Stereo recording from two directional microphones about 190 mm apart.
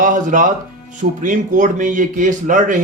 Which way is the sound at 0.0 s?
45° right (ahead or behind).